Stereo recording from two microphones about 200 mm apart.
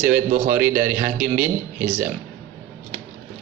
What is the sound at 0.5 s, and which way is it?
Speech, 10° right (ahead or behind).